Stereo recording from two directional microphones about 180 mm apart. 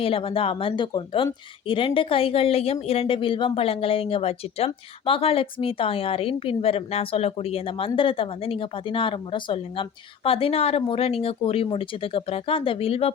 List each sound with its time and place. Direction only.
0.0 s speech: 30° left (ahead or behind)